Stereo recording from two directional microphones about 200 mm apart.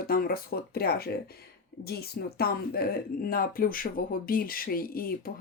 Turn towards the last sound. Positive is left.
turn(degrees=45)  # may be behind; listen again after turning